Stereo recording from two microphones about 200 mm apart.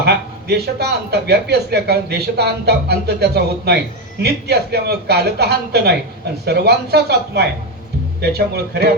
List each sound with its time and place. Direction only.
0.0 s speech: 55° right (ahead or behind)